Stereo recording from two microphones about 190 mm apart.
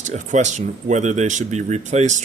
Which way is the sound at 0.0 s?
40° right (ahead or behind).